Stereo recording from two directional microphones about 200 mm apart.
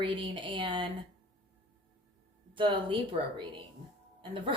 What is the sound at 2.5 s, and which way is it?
Speech, 25° right (ahead or behind).